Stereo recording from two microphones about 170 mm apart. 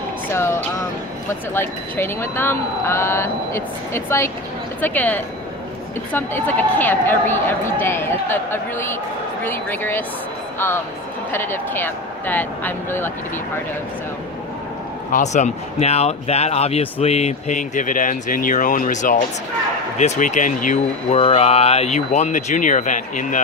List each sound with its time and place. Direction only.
0.3 s speech: 15° left (ahead or behind)
11.3 s speech: 15° left (ahead or behind)
15.1 s speech: 45° left (ahead or behind)
21.2 s speech: 35° left (ahead or behind)